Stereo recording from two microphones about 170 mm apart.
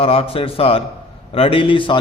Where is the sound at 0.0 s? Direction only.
35° left (ahead or behind).